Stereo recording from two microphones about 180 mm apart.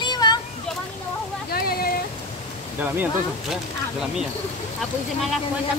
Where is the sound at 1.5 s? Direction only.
55° left (ahead or behind).